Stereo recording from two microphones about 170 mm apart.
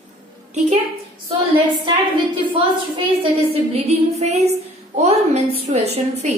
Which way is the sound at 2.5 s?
30° right (ahead or behind).